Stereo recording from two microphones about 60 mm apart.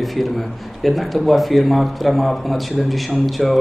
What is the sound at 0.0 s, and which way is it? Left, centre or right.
A man's voice, centre.